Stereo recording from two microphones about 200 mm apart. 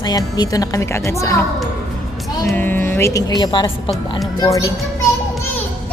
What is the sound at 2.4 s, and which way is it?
A woman's voice, 10° left (ahead or behind).